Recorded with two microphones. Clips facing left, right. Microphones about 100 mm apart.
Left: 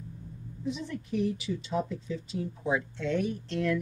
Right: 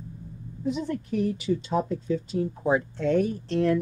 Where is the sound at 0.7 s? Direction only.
50° right (ahead or behind).